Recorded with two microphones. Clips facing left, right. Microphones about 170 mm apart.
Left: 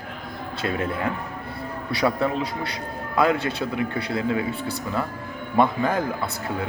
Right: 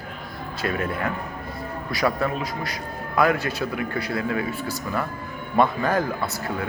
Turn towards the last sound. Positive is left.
turn(degrees=20)  # may be behind; listen again after turning